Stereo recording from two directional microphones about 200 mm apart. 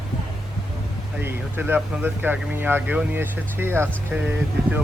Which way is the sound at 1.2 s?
10° right (ahead or behind).